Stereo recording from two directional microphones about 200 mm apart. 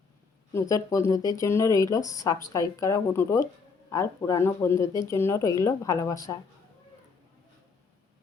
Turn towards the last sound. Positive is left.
turn(degrees=15)  # may be behind; listen again after turning